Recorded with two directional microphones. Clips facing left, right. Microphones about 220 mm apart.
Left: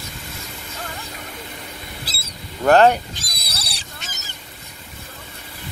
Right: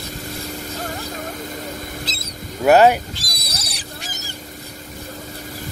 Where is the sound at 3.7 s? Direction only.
20° left (ahead or behind).